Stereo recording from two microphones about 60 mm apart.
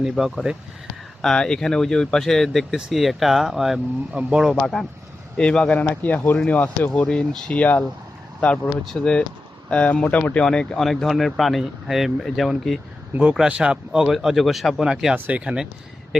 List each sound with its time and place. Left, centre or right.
0.0 s speech: centre
1.2 s speech: centre
4.1 s speech: centre
4.7 s speech: centre
5.8 s speech: left
7.6 s speech: left
8.8 s speech: centre; by 10.4 s left
10.4 s speech: centre
10.8 s speech: centre
13.5 s speech: centre
14.1 s speech: centre
15.1 s speech: right